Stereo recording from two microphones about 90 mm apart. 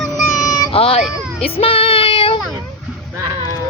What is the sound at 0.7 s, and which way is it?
Speech, 90° left.